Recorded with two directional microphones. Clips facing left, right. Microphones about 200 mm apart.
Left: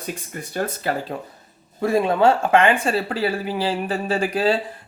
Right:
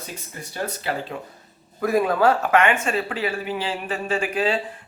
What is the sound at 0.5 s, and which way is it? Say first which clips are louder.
Speech: left 3 dB; 45° left (ahead or behind).